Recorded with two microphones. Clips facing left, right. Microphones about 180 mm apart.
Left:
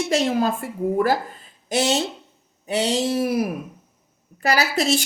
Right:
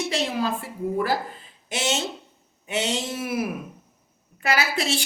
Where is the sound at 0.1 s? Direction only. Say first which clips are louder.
Left 9 dB; 45° left (ahead or behind).